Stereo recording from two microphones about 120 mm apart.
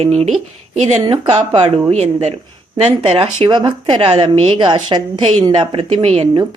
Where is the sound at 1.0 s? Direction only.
40° right (ahead or behind).